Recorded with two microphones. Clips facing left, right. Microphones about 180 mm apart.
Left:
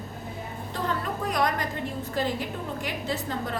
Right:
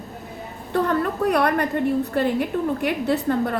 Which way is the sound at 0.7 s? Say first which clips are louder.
Right 9 dB; 65° right (ahead or behind).